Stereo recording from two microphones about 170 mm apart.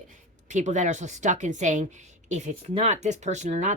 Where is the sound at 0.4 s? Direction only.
45° right (ahead or behind).